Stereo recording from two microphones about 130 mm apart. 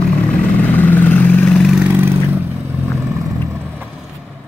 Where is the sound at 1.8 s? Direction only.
15° right (ahead or behind).